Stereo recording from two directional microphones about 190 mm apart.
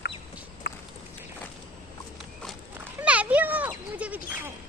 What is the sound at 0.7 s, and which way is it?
Walk, 60° left (ahead or behind).